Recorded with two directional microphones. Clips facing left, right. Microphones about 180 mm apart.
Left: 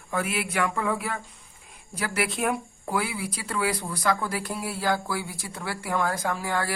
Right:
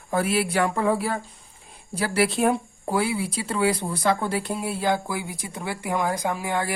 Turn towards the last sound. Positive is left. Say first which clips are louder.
# right 2 dB
turn(degrees=-20)  # may be behind; listen again after turning